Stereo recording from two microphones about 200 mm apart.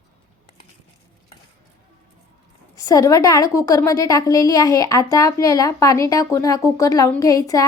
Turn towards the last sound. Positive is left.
turn(degrees=15)  # may be behind; listen again after turning